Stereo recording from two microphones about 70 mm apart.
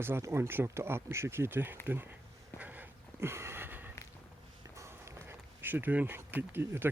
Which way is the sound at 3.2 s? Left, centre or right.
Right.